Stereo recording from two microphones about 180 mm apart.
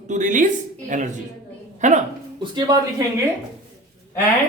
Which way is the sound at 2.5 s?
20° right (ahead or behind).